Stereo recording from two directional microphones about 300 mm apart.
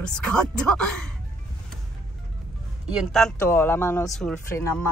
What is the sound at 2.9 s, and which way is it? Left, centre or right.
Speech, centre.